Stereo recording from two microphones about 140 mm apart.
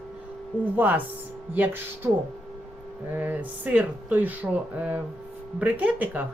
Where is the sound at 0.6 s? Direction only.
10° right (ahead or behind).